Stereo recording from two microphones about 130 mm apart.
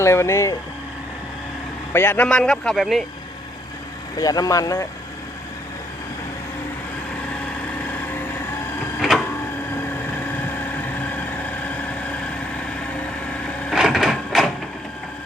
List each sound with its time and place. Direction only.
0.0 s speech: 20° left (ahead or behind)
1.9 s a man's voice: 15° left (ahead or behind); by 3.0 s centre (ahead or behind)
4.2 s speech: 30° left (ahead or behind)
9.0 s power windows: centre (ahead or behind)
13.7 s printer: 5° right (ahead or behind)